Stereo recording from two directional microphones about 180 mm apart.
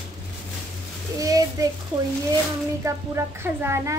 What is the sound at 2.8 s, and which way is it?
A woman's voice, 15° right (ahead or behind).